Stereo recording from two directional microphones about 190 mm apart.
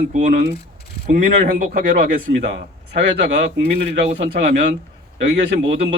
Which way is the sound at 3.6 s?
35° right (ahead or behind).